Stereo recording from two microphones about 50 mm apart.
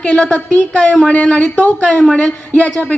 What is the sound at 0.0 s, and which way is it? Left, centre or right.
A woman's voice, left.